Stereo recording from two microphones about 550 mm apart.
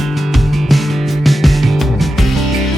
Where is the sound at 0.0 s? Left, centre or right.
Centre.